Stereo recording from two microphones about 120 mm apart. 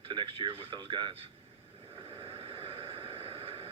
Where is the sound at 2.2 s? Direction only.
55° right (ahead or behind).